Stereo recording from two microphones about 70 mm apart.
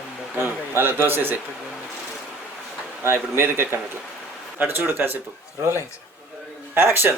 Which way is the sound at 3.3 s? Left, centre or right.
Right.